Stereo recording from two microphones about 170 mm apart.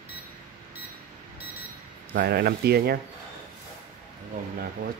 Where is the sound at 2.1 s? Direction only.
65° right (ahead or behind).